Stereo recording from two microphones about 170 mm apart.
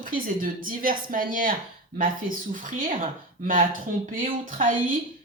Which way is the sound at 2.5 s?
50° right (ahead or behind).